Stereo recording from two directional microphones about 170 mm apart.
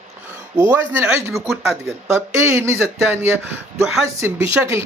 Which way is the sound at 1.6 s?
15° right (ahead or behind).